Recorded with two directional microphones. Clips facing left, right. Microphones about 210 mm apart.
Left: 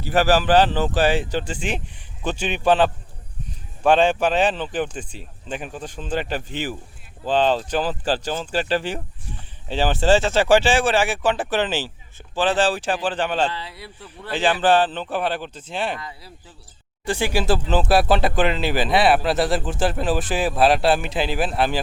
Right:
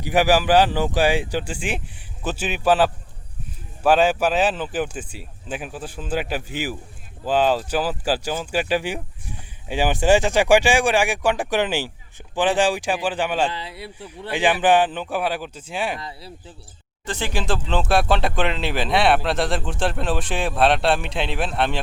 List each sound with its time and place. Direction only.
0.0 s speech: 15° right (ahead or behind)
13.6 s speech: 25° right (ahead or behind)
14.0 s speech: 15° right (ahead or behind)
16.0 s speech: 30° right (ahead or behind)
17.1 s speech: 10° left (ahead or behind)